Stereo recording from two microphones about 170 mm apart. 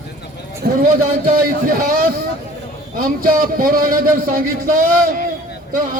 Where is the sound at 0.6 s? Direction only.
60° right (ahead or behind).